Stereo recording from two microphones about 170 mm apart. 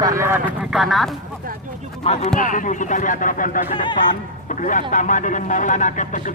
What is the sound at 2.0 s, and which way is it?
Speech, 35° left (ahead or behind).